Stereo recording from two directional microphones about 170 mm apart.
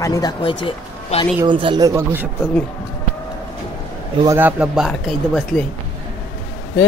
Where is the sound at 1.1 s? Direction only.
40° left (ahead or behind).